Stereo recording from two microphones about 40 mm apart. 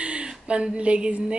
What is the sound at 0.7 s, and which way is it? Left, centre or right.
Speech, right.